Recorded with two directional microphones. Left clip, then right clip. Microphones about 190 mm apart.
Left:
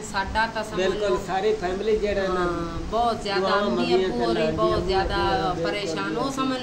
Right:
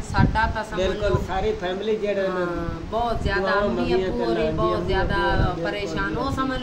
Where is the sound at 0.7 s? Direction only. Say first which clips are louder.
Even; 15° right (ahead or behind).